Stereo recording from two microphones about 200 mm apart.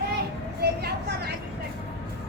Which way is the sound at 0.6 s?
55° right (ahead or behind).